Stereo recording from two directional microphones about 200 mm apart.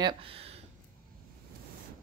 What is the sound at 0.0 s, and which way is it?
Speech, 30° right (ahead or behind).